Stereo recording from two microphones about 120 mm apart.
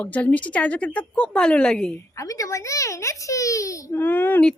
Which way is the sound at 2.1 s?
30° left (ahead or behind).